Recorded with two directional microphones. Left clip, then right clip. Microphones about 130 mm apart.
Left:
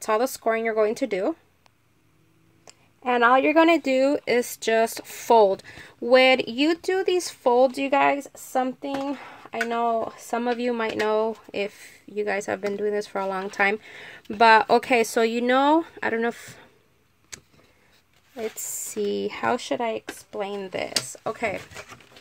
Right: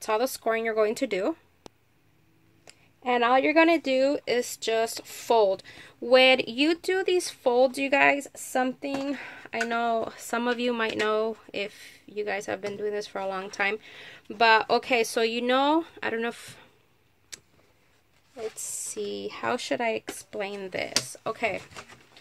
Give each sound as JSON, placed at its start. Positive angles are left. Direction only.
{"t": 0.0, "sound": "speech", "side_deg": 40}
{"t": 2.6, "sound": "speech", "side_deg": 40}
{"t": 8.5, "sound": "speech", "side_deg": 5}
{"t": 17.3, "sound": "vehicle", "side_deg": 60}
{"t": 18.3, "sound": "speech", "side_deg": 75}
{"t": 19.5, "sound": "speech", "side_deg": 20}